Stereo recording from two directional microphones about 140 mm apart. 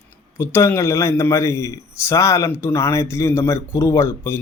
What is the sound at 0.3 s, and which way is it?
A man's voice, 15° left (ahead or behind).